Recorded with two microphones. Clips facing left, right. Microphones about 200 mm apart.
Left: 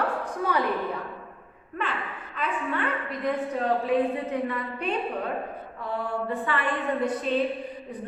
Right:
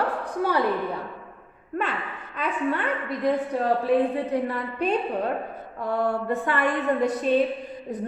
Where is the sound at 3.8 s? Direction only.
35° right (ahead or behind).